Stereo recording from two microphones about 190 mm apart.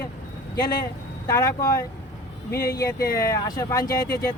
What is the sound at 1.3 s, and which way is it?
Speech, 20° left (ahead or behind).